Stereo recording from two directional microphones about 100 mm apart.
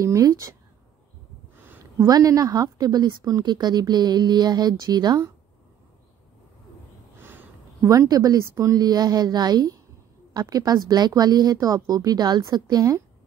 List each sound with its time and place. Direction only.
0.0 s a woman's voice: 35° right (ahead or behind)
2.0 s a woman's voice: 40° right (ahead or behind)
7.2 s a sound: 25° right (ahead or behind)
8.7 s a woman's voice: 45° right (ahead or behind)